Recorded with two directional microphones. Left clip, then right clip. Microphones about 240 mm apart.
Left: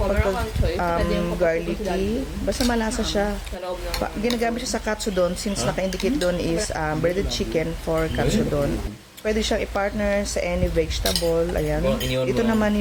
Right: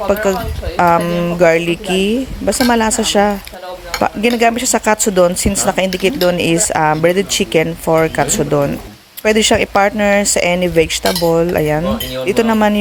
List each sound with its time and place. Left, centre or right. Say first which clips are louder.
0.8 s speech: right 13 dB; right